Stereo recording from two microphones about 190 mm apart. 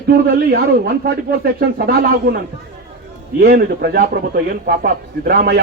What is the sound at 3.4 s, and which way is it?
A man's voice, 55° right (ahead or behind).